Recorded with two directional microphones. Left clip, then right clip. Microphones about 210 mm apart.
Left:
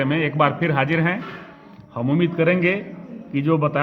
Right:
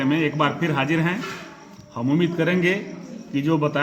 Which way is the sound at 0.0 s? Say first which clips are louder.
Left 2 dB; 40° left (ahead or behind).